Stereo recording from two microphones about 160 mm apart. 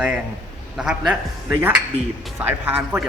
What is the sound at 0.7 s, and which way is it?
Speech, 5° right (ahead or behind).